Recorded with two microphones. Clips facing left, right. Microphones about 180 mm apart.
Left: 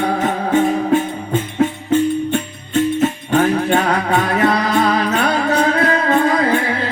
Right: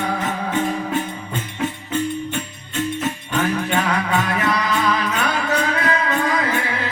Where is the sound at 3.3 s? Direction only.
35° left (ahead or behind).